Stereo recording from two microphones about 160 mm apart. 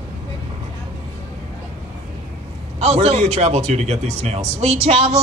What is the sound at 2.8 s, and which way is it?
Speech, 40° right (ahead or behind).